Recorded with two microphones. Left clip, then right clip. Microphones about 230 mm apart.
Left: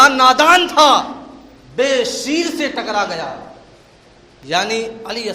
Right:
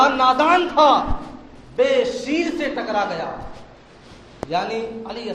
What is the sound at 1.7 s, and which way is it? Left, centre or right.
Speech, left.